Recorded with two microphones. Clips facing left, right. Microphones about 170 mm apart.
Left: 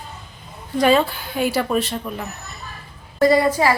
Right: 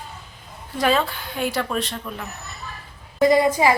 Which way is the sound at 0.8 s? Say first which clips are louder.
Left 4 dB; centre (ahead or behind).